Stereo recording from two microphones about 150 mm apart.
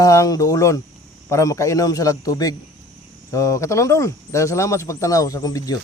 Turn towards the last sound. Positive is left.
turn(degrees=25)  # may be behind; listen again after turning